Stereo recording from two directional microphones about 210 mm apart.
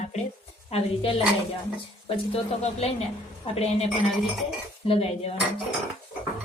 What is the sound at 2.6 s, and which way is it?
A woman's voice, 30° left (ahead or behind).